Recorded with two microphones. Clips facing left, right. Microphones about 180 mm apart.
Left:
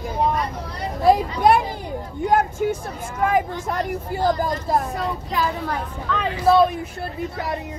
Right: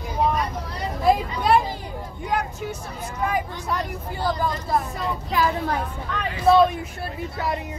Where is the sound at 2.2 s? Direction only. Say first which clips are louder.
Left 8 dB; 45° left (ahead or behind).